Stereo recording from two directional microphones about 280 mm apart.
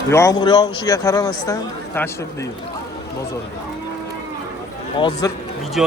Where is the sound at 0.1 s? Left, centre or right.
Centre.